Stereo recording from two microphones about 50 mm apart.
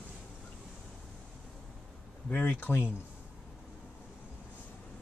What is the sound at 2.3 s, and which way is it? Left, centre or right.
Speech, left.